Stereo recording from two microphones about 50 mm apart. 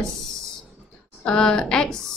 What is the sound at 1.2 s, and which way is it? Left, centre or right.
Speech, centre.